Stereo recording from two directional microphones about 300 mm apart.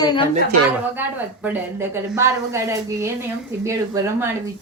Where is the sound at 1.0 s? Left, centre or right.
Centre.